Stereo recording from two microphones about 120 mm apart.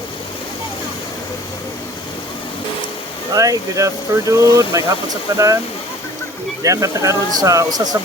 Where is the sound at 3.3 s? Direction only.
30° right (ahead or behind).